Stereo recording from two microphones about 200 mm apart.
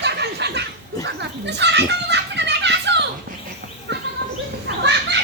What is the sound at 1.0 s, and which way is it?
A child's voice, 60° right (ahead or behind).